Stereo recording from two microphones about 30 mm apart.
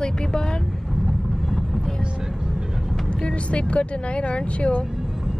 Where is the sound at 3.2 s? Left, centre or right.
Left.